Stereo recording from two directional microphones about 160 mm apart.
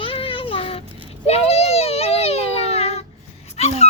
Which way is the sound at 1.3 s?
40° left (ahead or behind).